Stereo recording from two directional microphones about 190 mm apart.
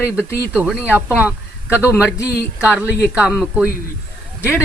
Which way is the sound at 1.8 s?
15° left (ahead or behind).